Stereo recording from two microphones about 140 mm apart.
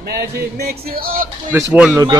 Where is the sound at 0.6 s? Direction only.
90° right.